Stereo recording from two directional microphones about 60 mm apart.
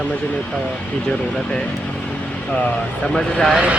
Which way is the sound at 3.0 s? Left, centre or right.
Centre.